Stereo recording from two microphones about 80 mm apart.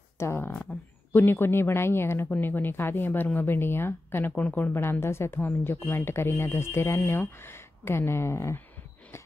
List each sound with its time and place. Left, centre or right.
0.2 s speech: left